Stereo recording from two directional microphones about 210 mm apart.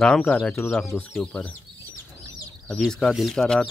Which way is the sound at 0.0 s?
5° left (ahead or behind).